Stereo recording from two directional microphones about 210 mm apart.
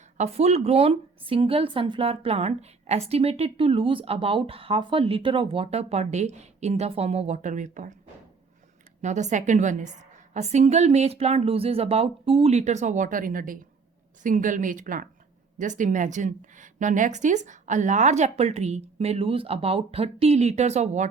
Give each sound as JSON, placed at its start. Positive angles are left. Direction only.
{"t": 0.2, "sound": "a woman's voice", "side_deg": -30}
{"t": 9.0, "sound": "a woman's voice", "side_deg": -35}